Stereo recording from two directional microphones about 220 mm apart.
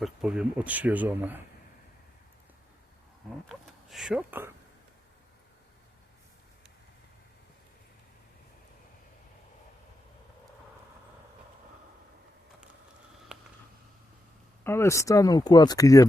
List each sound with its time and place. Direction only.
0.0 s speech: 5° right (ahead or behind)
3.5 s speech: centre (ahead or behind)
13.3 s a sound: 5° right (ahead or behind)
14.6 s speech: 10° left (ahead or behind)